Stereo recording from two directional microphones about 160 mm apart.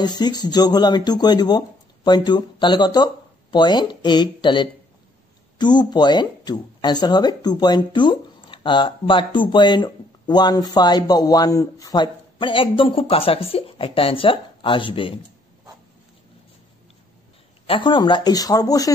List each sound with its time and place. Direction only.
0.0 s speech: 25° left (ahead or behind)
17.6 s speech: 30° left (ahead or behind)